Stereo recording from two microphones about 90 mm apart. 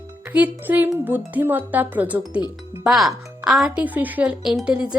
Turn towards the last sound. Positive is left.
turn(degrees=-10)  # may be behind; listen again after turning